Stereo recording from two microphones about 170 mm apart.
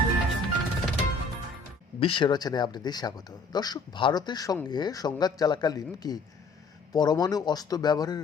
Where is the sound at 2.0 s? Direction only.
30° left (ahead or behind).